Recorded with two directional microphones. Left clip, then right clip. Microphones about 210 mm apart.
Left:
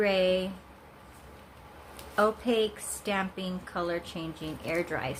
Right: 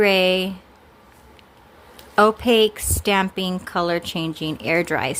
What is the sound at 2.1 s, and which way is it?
A woman's voice, 55° right (ahead or behind).